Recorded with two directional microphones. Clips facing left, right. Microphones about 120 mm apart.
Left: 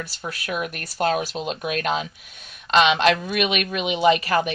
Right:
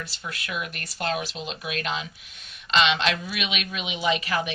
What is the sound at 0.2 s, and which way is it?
A woman's voice, 45° left (ahead or behind).